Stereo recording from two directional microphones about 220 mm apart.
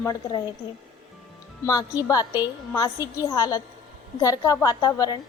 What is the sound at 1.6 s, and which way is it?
A woman's voice, 15° left (ahead or behind).